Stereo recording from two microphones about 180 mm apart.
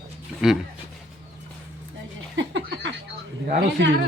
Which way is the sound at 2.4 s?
85° right.